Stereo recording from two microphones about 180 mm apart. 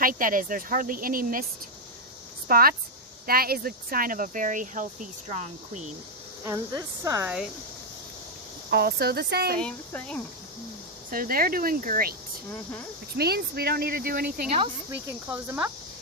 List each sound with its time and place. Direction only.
0.0 s speech: 50° right (ahead or behind)
2.5 s speech: 55° right (ahead or behind)
6.4 s speech: 20° right (ahead or behind)
8.7 s speech: 60° right (ahead or behind)
9.6 s speech: 5° left (ahead or behind)
11.1 s speech: 55° right (ahead or behind)
13.1 s speech: 60° right (ahead or behind)
14.8 s speech: 15° right (ahead or behind)